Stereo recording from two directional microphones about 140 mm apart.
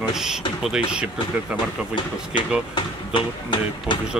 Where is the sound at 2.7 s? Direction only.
35° left (ahead or behind).